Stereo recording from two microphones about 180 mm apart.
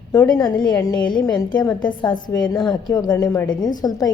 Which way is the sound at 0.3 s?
25° left (ahead or behind).